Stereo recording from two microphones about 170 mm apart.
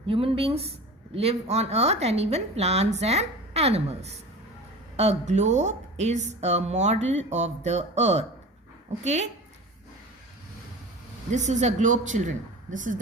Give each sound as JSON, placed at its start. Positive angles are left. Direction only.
{"t": 0.1, "sound": "speech", "side_deg": -35}
{"t": 11.3, "sound": "speech", "side_deg": -45}